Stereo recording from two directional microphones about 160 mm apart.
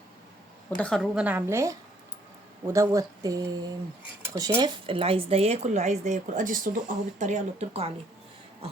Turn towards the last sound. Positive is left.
turn(degrees=-40)  # may be behind; listen again after turning